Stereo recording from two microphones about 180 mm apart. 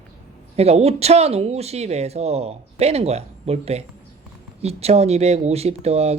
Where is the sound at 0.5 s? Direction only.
35° right (ahead or behind).